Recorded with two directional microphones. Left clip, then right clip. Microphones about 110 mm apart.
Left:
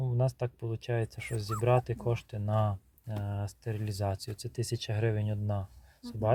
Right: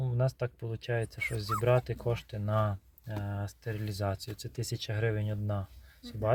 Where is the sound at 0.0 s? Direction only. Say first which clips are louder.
Even; 10° left (ahead or behind).